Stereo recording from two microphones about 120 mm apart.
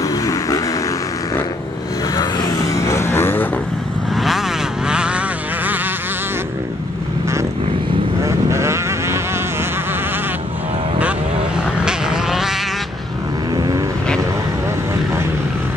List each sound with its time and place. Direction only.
0.0 s a sound: 30° left (ahead or behind)
2.1 s vehicle: 35° left (ahead or behind)
4.2 s vehicle: centre (ahead or behind)
8.2 s vehicle: 25° right (ahead or behind)
11.8 s vehicle: 5° right (ahead or behind)